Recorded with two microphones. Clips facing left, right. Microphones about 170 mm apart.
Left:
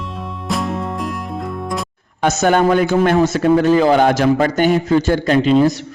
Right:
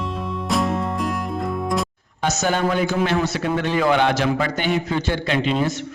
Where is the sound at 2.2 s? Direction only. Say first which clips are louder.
Left 7 dB; 55° left (ahead or behind).